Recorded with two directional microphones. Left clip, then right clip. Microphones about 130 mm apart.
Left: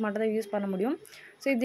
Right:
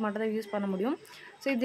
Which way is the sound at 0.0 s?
15° left (ahead or behind).